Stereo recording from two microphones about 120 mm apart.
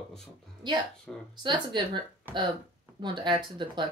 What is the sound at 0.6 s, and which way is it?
Speech, 40° right (ahead or behind).